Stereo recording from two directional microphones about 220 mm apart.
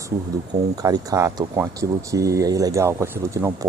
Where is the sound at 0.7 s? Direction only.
15° right (ahead or behind).